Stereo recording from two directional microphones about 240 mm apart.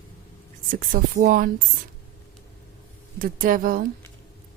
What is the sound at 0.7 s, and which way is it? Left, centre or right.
Speech, right.